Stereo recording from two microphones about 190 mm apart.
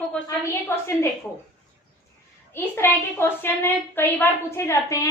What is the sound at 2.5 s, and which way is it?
A woman's voice, 10° left (ahead or behind).